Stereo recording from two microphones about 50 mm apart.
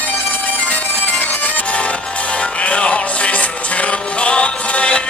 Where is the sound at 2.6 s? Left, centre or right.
Left.